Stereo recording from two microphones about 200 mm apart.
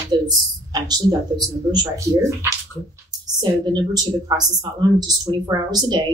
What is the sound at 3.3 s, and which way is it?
Speech, 20° right (ahead or behind).